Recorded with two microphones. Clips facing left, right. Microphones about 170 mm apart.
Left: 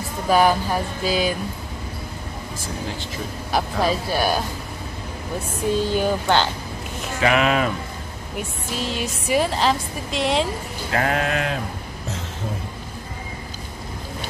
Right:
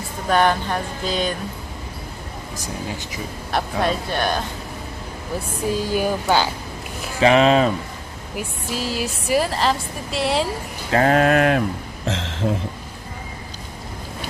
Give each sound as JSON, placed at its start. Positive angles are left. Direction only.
{"t": 0.3, "sound": "a woman's voice", "side_deg": 5}
{"t": 3.5, "sound": "a woman's voice", "side_deg": 0}
{"t": 5.7, "sound": "speech", "side_deg": -10}
{"t": 7.2, "sound": "speech", "side_deg": -30}
{"t": 8.4, "sound": "a woman's voice", "side_deg": -5}
{"t": 10.9, "sound": "a sound", "side_deg": -30}
{"t": 11.1, "sound": "a sound", "side_deg": -50}